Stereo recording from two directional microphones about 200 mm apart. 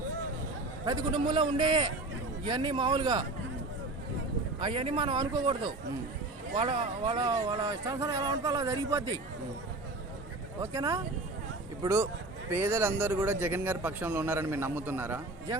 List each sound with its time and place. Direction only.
0.9 s speech: 20° right (ahead or behind)
4.6 s speech: 25° right (ahead or behind)
10.6 s speech: 15° right (ahead or behind)